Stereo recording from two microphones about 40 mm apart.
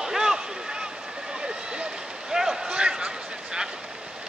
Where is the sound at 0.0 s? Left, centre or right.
Centre.